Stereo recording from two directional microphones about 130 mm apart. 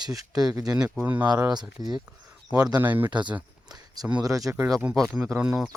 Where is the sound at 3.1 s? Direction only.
35° right (ahead or behind).